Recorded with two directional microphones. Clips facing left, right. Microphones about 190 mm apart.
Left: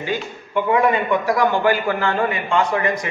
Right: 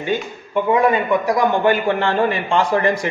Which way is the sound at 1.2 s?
20° right (ahead or behind).